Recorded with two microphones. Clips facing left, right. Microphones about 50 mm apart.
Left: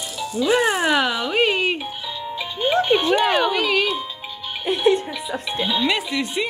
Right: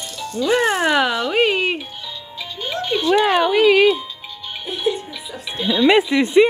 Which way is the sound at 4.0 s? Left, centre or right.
Centre.